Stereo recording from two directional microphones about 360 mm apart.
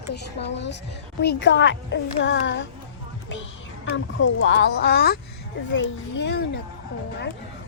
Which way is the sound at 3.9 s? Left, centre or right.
Left.